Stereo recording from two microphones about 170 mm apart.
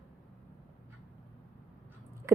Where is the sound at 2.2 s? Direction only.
15° right (ahead or behind).